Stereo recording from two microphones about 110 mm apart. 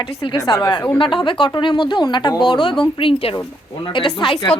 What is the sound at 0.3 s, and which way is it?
A woman's voice, 35° left (ahead or behind).